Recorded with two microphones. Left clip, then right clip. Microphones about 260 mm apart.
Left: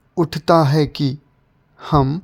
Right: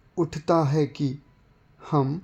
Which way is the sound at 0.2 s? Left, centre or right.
Left.